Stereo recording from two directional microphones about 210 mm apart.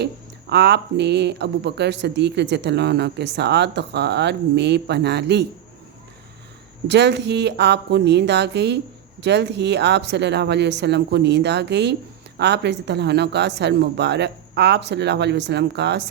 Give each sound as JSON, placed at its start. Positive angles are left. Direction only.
{"t": 0.5, "sound": "speech", "side_deg": -55}
{"t": 6.8, "sound": "speech", "side_deg": -55}